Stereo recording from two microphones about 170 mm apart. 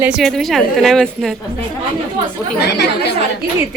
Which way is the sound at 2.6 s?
75° left (ahead or behind).